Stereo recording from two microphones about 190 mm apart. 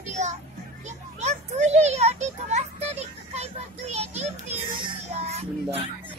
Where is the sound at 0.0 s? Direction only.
40° right (ahead or behind).